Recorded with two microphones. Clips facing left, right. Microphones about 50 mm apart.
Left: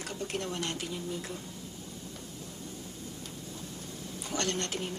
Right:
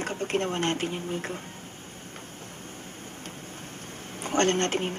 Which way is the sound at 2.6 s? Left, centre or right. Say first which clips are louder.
Right 1 dB; right.